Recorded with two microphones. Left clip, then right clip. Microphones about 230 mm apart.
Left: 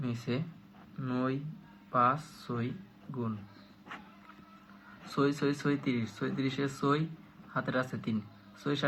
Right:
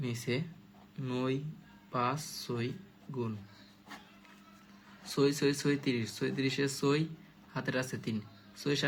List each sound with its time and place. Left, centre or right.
0.0 s speech: right
5.1 s speech: right